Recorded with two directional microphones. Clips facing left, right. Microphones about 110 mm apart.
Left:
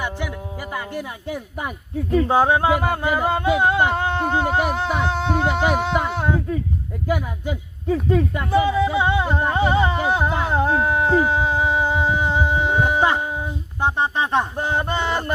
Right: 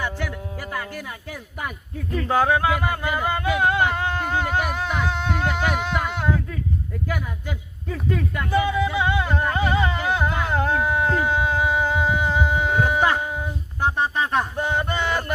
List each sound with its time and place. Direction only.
0.7 s speech: 20° left (ahead or behind)
8.1 s a sound: 25° left (ahead or behind)
13.8 s speech: 20° left (ahead or behind)